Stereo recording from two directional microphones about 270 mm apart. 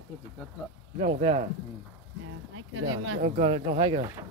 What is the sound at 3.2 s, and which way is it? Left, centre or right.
Speech, right.